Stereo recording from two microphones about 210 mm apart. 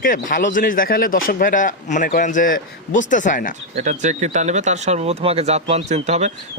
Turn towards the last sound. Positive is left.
turn(degrees=-35)  # may be behind; listen again after turning